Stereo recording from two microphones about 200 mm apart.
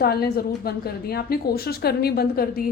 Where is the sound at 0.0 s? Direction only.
50° left (ahead or behind).